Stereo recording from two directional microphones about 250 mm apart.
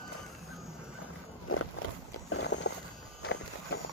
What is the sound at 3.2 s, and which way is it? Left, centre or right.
Walk, left.